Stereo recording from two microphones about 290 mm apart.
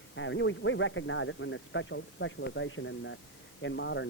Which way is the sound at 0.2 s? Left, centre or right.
Left.